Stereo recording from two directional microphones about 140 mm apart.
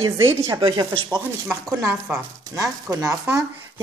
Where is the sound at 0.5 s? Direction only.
35° right (ahead or behind).